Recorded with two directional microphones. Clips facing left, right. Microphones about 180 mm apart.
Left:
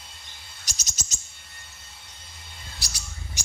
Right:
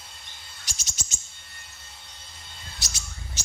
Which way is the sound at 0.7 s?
40° left (ahead or behind).